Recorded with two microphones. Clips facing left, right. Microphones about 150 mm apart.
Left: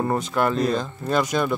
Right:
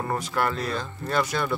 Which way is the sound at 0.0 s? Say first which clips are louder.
Left 4 dB; 20° left (ahead or behind).